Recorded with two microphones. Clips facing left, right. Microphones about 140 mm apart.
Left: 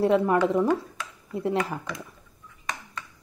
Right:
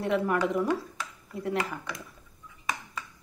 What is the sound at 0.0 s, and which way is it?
A woman's voice, 30° left (ahead or behind).